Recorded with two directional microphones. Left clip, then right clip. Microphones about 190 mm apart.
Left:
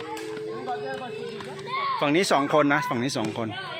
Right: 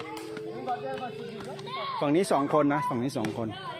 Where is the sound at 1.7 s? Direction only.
85° right.